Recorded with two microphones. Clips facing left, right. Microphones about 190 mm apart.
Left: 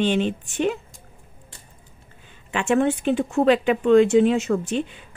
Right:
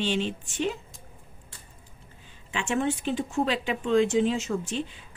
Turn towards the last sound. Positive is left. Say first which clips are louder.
# left 7 dB
turn(degrees=65)  # may be behind; listen again after turning